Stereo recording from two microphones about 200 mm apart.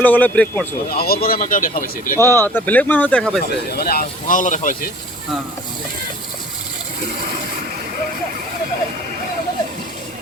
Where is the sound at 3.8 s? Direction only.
50° left (ahead or behind).